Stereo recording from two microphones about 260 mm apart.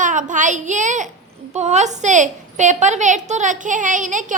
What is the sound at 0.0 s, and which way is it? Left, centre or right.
A child's voice, right.